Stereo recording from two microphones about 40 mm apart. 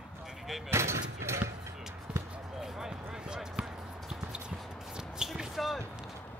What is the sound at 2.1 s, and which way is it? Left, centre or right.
Basketball bounce, right.